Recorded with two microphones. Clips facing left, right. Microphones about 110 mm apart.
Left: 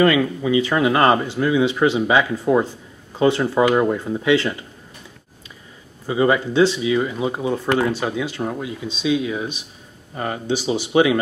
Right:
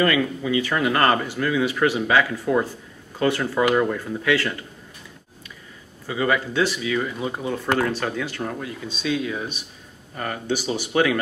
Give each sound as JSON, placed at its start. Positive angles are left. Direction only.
{"t": 0.0, "sound": "speech", "side_deg": 20}
{"t": 6.0, "sound": "speech", "side_deg": 25}